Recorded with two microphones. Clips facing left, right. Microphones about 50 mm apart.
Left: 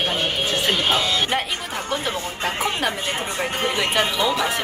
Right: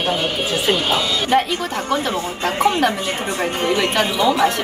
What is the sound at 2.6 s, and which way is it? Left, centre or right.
Speech, centre.